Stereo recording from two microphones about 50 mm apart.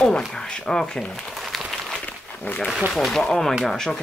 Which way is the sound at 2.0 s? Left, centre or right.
Left.